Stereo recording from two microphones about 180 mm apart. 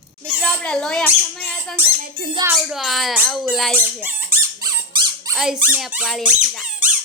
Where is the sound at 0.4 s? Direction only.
5° left (ahead or behind).